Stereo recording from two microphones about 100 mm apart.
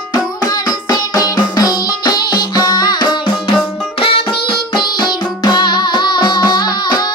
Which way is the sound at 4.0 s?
65° left (ahead or behind).